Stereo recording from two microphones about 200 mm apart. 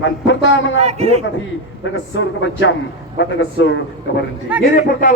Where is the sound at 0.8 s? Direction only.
30° right (ahead or behind).